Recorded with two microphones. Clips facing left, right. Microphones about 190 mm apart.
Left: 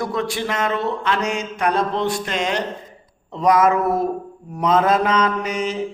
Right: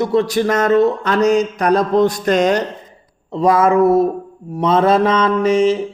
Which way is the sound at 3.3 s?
30° right (ahead or behind).